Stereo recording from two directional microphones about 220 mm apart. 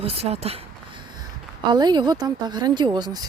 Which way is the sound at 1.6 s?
20° right (ahead or behind).